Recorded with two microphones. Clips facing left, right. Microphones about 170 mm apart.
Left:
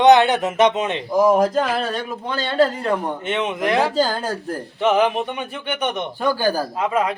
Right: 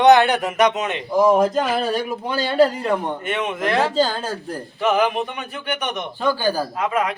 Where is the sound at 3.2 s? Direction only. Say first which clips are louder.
Left 3 dB; 20° left (ahead or behind).